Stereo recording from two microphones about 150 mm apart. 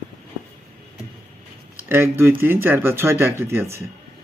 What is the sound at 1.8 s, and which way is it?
Speech, 15° right (ahead or behind).